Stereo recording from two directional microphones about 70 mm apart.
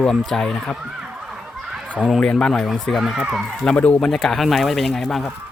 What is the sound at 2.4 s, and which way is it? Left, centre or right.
Speech, centre.